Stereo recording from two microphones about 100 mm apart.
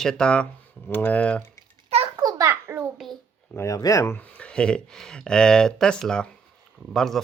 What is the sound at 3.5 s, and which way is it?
Speech, 30° left (ahead or behind).